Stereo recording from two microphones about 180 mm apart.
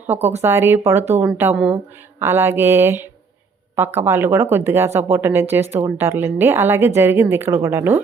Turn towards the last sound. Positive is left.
turn(degrees=-15)  # may be behind; listen again after turning